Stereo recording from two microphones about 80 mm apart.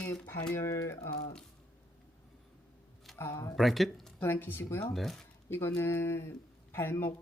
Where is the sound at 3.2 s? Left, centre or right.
Left.